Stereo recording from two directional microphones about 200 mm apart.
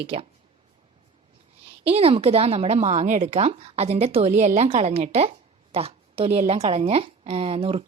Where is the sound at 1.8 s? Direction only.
30° right (ahead or behind).